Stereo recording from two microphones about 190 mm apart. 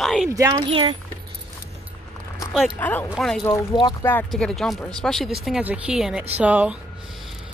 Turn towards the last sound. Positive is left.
turn(degrees=-5)  # may be behind; listen again after turning